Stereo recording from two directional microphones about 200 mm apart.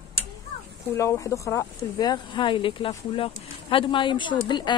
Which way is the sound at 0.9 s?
15° left (ahead or behind).